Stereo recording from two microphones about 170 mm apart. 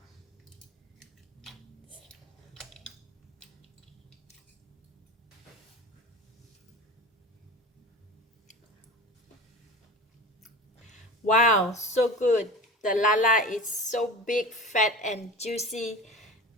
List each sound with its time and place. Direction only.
2.5 s a sound: centre (ahead or behind)
11.3 s speech: 45° left (ahead or behind)
15.6 s speech: centre (ahead or behind)